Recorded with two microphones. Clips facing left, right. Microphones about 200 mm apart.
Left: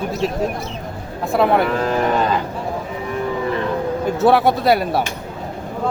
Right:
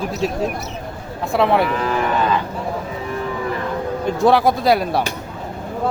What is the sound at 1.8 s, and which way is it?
Cattle, 40° left (ahead or behind).